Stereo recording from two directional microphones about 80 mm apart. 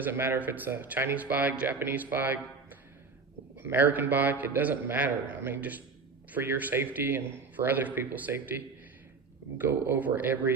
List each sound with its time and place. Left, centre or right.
0.0 s a man's voice: right